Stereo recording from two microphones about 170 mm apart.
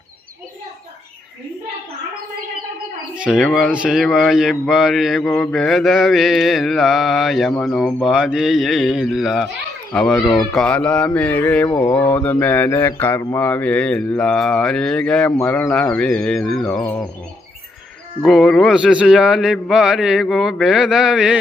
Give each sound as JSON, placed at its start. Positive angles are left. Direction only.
{"t": 3.2, "sound": "speech", "side_deg": 0}
{"t": 16.8, "sound": "speech", "side_deg": 15}
{"t": 18.2, "sound": "speech", "side_deg": 0}